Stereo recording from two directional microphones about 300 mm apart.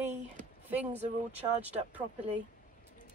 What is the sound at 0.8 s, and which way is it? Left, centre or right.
Speech, right.